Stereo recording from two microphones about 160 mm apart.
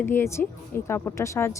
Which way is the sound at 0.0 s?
15° left (ahead or behind).